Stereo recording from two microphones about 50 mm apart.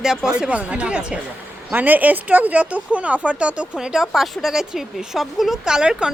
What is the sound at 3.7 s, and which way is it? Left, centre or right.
Speech, centre.